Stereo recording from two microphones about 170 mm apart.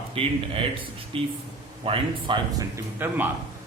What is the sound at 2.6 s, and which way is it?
Speech, 10° right (ahead or behind).